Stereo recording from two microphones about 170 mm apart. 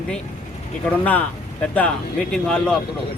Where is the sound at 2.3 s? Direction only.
5° left (ahead or behind).